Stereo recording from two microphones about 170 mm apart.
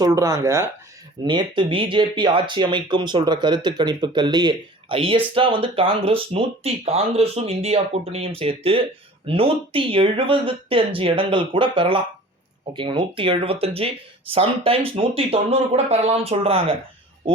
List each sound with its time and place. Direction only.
0.0 s speech: 20° right (ahead or behind)
1.2 s speech: 25° right (ahead or behind)